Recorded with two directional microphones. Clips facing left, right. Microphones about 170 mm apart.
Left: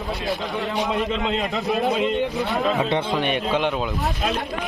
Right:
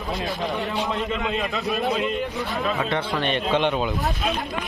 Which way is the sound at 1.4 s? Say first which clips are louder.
Left 2 dB; 20° left (ahead or behind).